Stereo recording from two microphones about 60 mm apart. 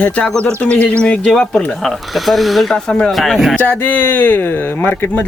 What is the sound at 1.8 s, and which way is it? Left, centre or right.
Speech, centre.